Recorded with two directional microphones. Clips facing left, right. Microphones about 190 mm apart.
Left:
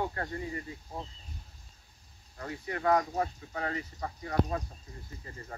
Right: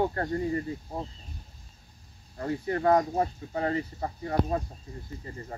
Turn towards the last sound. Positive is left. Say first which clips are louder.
# right 3 dB
turn(degrees=-30)  # may be behind; listen again after turning